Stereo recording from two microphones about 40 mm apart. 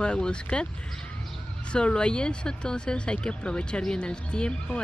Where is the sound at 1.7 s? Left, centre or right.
Left.